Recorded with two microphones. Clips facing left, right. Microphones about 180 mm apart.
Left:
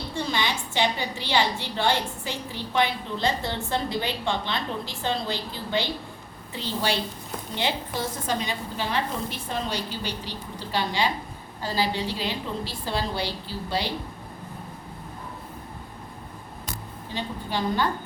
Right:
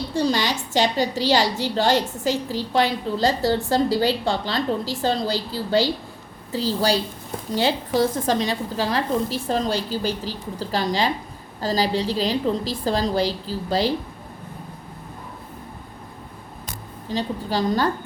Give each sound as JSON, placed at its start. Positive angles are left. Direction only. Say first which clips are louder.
{"t": 0.1, "sound": "a woman's voice", "louder": "right 6 dB", "side_deg": -40}
{"t": 17.1, "sound": "a woman's voice", "louder": "right 6 dB", "side_deg": -40}